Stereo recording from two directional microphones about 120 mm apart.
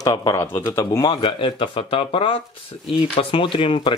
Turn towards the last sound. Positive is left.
turn(degrees=45)  # may be behind; listen again after turning